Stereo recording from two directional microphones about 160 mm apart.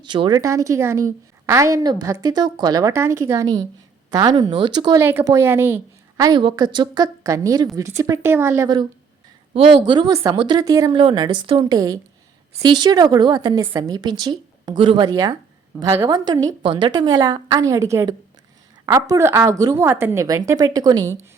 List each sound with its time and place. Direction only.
0.0 s a woman's voice: 30° right (ahead or behind)
6.1 s a woman's voice: 25° right (ahead or behind)